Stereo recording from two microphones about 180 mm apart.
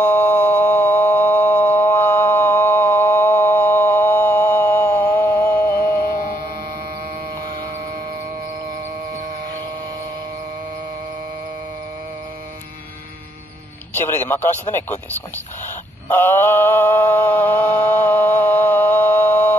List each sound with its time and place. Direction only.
0.6 s a sound: 10° left (ahead or behind)
7.4 s mains hum: 55° right (ahead or behind)
13.9 s music: 10° left (ahead or behind)
14.7 s speech: 10° left (ahead or behind)
16.1 s mantra: 15° left (ahead or behind)